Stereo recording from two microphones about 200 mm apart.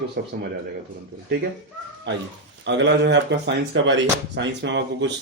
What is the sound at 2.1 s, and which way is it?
Speech, 65° right (ahead or behind).